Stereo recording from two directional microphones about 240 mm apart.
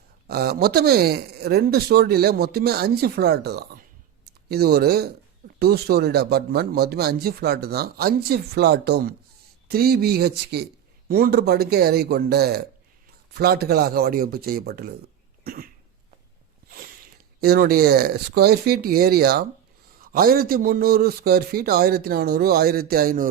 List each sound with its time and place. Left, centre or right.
0.3 s speech: right
15.4 s cough: right
17.4 s speech: right